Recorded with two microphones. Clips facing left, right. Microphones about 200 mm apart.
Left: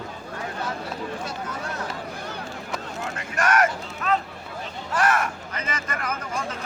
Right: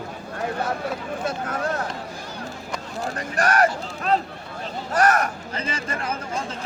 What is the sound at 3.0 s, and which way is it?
A man's voice, 35° right (ahead or behind).